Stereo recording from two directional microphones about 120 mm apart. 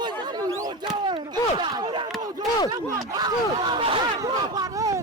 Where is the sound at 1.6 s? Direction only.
40° right (ahead or behind).